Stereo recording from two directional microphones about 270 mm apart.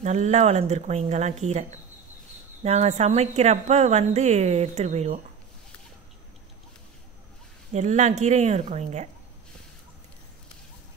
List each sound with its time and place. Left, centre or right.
0.0 s a woman's voice: right
7.7 s a woman's voice: right